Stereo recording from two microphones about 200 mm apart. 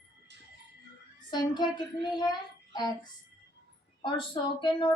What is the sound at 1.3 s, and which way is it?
Speech, 20° left (ahead or behind).